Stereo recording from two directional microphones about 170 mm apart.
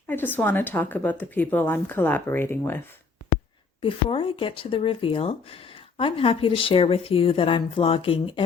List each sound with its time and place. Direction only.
0.1 s speech: 10° left (ahead or behind)
3.8 s speech: 30° left (ahead or behind)